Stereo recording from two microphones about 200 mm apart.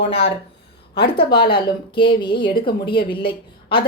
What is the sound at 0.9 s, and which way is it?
Speech, 50° left (ahead or behind).